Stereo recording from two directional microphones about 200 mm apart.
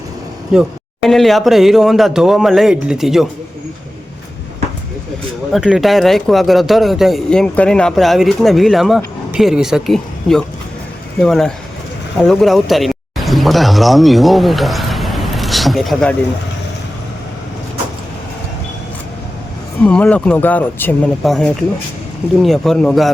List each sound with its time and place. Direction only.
0.5 s speech: centre (ahead or behind)
5.5 s speech: 5° right (ahead or behind)
19.8 s speech: 5° left (ahead or behind)